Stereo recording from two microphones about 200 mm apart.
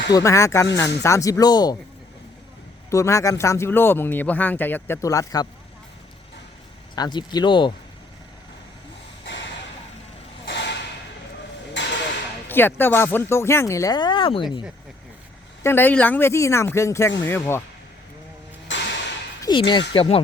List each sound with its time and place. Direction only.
0.1 s speech: 15° left (ahead or behind)
2.9 s speech: 15° left (ahead or behind)
6.9 s speech: 20° left (ahead or behind)
9.2 s a sound: 60° left (ahead or behind)
11.8 s a sound: 65° left (ahead or behind)
12.5 s speech: 10° left (ahead or behind); by 14.4 s 25° left (ahead or behind)
15.6 s speech: 10° left (ahead or behind)
18.7 s a sound: 60° left (ahead or behind)
19.4 s speech: 25° left (ahead or behind)